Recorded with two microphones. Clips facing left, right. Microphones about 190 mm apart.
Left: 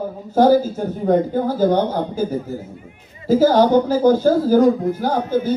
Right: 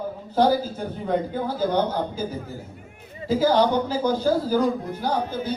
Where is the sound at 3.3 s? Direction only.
45° left (ahead or behind).